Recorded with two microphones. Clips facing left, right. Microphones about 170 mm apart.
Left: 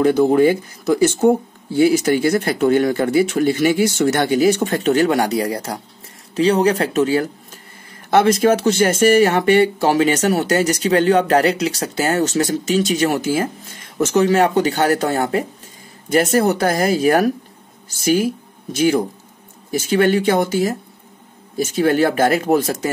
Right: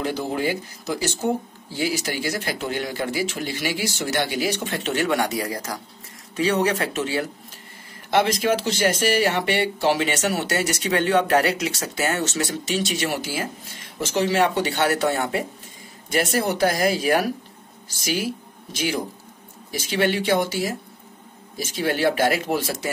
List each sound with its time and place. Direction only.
0.0 s speech: 50° left (ahead or behind)